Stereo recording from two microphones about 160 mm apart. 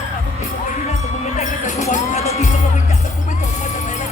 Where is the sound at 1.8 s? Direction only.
45° left (ahead or behind).